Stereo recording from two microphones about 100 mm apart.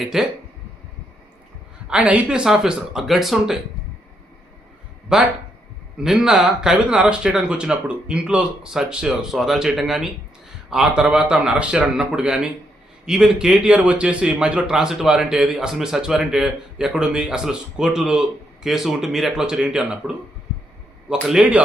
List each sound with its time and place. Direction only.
0.0 s speech: 5° right (ahead or behind)
1.9 s speech: 10° right (ahead or behind)
5.1 s a man's voice: 5° right (ahead or behind)
21.2 s speech: 5° right (ahead or behind)